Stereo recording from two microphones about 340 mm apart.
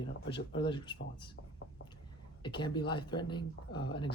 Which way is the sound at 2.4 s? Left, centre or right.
Centre.